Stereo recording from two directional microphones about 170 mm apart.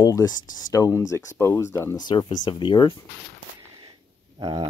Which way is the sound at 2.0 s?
25° left (ahead or behind).